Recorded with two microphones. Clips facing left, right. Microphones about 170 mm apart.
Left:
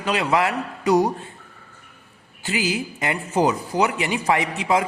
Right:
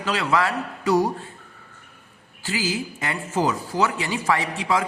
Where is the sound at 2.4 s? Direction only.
20° left (ahead or behind).